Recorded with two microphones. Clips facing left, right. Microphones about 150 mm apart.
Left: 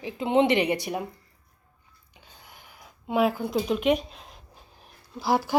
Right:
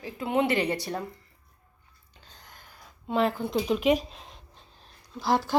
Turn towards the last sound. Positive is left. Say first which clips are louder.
# left 1 dB
turn(degrees=10)  # may be behind; listen again after turning